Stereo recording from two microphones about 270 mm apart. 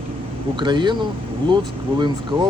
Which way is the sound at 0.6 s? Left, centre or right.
Centre.